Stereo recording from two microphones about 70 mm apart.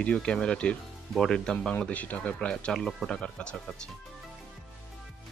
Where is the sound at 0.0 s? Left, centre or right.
Centre.